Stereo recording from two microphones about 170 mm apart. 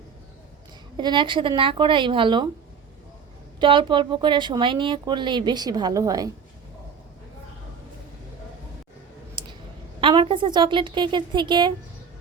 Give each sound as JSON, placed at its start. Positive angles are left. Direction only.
{"t": 0.9, "sound": "a woman's voice", "side_deg": -25}
{"t": 3.6, "sound": "a woman's voice", "side_deg": -30}
{"t": 9.4, "sound": "clicking", "side_deg": -25}
{"t": 10.0, "sound": "a woman's voice", "side_deg": -30}